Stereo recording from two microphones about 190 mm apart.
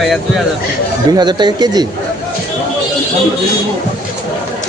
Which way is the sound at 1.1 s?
20° right (ahead or behind).